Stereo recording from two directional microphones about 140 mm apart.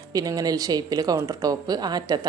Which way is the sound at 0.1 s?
25° right (ahead or behind).